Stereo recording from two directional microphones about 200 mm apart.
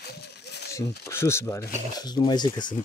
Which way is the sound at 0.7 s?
15° left (ahead or behind).